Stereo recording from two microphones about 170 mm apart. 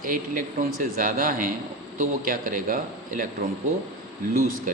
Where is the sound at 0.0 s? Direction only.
55° right (ahead or behind).